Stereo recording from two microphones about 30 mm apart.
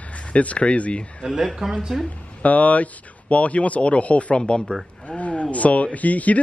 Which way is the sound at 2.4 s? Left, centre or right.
Left.